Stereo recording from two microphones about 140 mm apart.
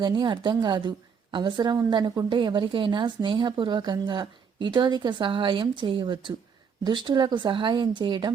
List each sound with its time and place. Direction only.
0.0 s a woman's voice: 35° right (ahead or behind)